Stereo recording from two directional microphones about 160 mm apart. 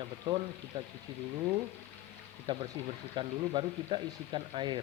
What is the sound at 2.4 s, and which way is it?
Speech, 30° right (ahead or behind).